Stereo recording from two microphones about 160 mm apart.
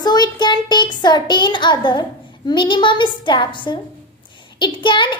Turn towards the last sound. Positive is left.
turn(degrees=30)  # may be behind; listen again after turning